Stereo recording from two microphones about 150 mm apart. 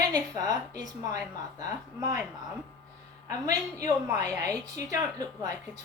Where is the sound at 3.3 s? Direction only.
20° right (ahead or behind).